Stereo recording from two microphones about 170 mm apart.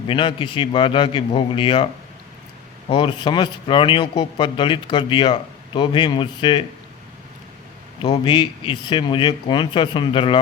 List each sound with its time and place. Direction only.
0.1 s a man's voice: 30° left (ahead or behind)
2.9 s speech: 30° left (ahead or behind)
8.0 s speech: 25° left (ahead or behind)